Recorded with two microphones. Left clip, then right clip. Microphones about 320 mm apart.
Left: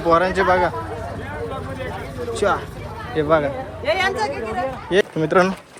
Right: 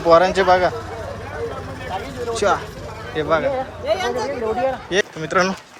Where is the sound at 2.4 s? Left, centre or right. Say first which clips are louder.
Right 1 dB; centre.